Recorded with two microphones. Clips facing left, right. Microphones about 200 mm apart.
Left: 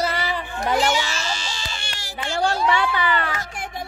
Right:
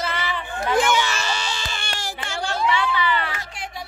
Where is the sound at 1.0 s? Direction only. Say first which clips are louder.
Right 2 dB; 60° right (ahead or behind).